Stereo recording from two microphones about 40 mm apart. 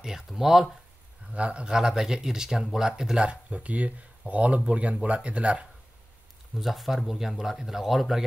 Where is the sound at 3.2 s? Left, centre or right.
Right.